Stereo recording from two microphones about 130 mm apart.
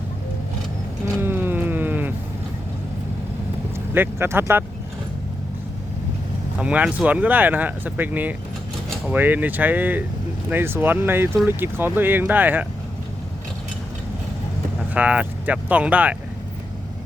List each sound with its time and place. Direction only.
1.2 s a sound: 15° right (ahead or behind)
3.9 s speech: 15° right (ahead or behind)
6.6 s speech: 10° right (ahead or behind)
14.9 s speech: 10° right (ahead or behind)